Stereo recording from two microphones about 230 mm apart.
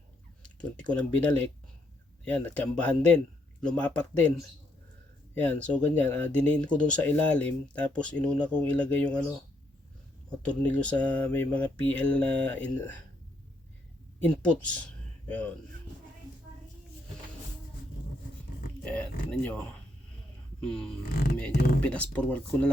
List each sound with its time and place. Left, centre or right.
0.6 s speech: centre
10.2 s speech: centre
14.4 s speech: centre
18.9 s speech: centre
20.6 s a sound: centre
21.1 s speech: left
21.8 s speech: centre